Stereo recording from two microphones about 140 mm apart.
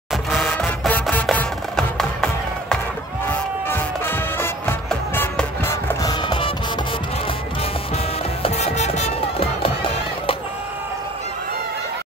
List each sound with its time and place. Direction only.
0.1 s music: centre (ahead or behind)
3.3 s music: 15° left (ahead or behind)
6.0 s music: 35° left (ahead or behind)
7.9 s music: 50° left (ahead or behind)